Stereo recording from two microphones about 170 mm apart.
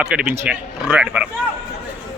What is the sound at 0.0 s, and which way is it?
Speech, 5° right (ahead or behind).